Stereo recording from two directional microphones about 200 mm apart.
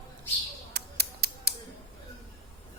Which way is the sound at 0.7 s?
55° right (ahead or behind).